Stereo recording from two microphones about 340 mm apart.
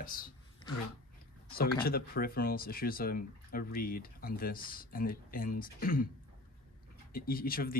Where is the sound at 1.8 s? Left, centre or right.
Left.